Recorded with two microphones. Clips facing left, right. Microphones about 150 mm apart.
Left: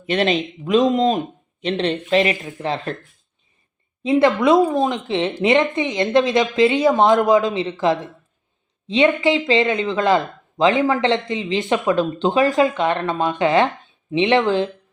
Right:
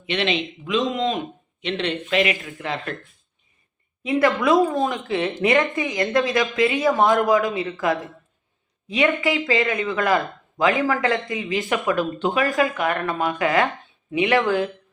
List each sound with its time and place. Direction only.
0.0 s a man's voice: 45° left (ahead or behind)
4.0 s speech: 25° left (ahead or behind)